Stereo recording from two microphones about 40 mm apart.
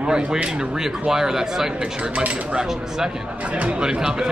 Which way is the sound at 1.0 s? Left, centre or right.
Centre.